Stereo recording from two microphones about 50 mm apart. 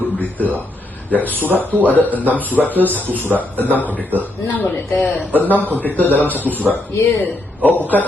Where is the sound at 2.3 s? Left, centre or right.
Right.